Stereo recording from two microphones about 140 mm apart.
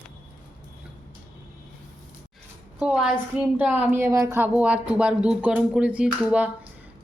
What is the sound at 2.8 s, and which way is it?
A woman's voice, 5° right (ahead or behind).